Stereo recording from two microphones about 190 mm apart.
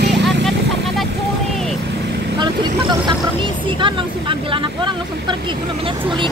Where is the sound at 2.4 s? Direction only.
25° right (ahead or behind).